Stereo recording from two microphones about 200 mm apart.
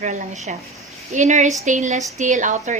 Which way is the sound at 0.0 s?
40° right (ahead or behind).